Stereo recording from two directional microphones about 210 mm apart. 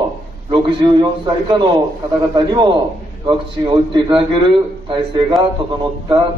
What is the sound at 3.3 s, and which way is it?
A man's voice, 20° right (ahead or behind).